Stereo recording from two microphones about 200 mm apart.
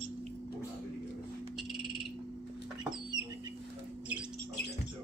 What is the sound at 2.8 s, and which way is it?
Chicken, 5° right (ahead or behind).